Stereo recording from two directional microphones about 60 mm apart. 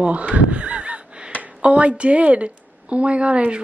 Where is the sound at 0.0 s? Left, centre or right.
Right.